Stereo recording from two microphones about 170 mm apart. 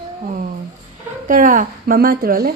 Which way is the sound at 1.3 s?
50° right (ahead or behind).